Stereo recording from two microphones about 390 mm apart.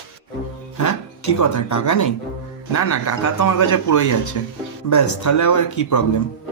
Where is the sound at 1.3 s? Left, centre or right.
Left.